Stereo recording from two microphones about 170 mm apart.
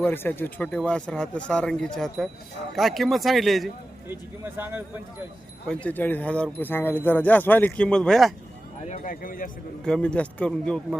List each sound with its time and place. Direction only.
0.0 s speech: 10° left (ahead or behind)
4.1 s speech: 10° right (ahead or behind)
5.6 s speech: 10° left (ahead or behind)
8.9 s speech: 55° left (ahead or behind)
9.8 s speech: 5° left (ahead or behind)